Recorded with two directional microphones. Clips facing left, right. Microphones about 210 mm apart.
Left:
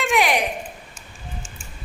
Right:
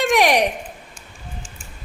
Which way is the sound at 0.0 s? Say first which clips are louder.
Right 4 dB; 40° right (ahead or behind).